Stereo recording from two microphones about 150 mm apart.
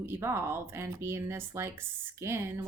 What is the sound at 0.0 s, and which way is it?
Speech, 15° right (ahead or behind).